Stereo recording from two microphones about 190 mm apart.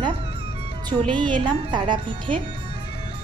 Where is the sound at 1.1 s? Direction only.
25° right (ahead or behind).